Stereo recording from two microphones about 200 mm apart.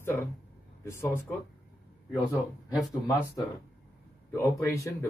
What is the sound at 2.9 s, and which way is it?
Speech, 20° left (ahead or behind).